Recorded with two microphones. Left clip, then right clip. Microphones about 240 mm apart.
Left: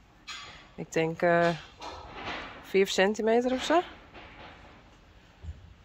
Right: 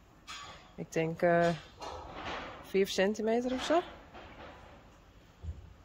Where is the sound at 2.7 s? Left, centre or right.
Centre.